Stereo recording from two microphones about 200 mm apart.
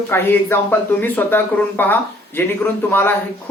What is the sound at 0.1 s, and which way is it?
Speech, 10° left (ahead or behind).